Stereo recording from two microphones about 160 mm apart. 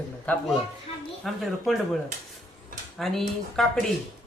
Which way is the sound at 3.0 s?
Centre (ahead or behind).